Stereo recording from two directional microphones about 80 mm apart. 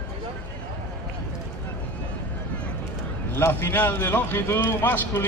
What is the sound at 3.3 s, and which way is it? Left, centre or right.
A man's voice, left.